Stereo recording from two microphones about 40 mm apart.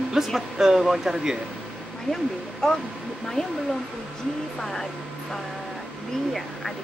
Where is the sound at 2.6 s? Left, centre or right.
Centre.